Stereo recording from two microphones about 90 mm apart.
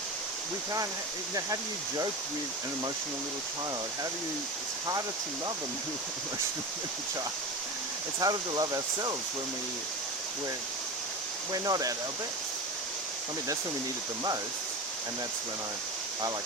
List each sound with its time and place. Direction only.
8.2 s speech: 45° right (ahead or behind)
11.5 s speech: 40° right (ahead or behind)